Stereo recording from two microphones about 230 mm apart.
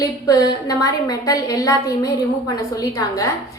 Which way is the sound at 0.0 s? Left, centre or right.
Centre.